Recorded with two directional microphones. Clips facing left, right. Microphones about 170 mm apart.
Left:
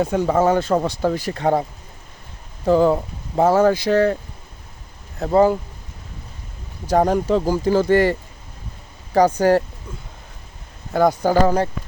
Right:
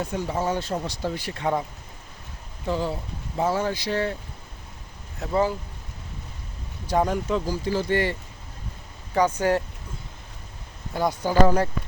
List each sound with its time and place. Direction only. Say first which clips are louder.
0.3 s speech: left 10 dB; 90° left
0.5 s speech: left 9 dB; 55° left (ahead or behind); by 1.6 s 35° left (ahead or behind)
2.6 s speech: left 12 dB; 50° left (ahead or behind)
5.2 s speech: left 8 dB; 45° left (ahead or behind)
6.8 s speech: left 6 dB; 40° left (ahead or behind)
7.5 s speech: left 10 dB; 55° left (ahead or behind)
9.1 s speech: left 7 dB; 35° left (ahead or behind)
10.9 s speech: left 5 dB; 45° left (ahead or behind)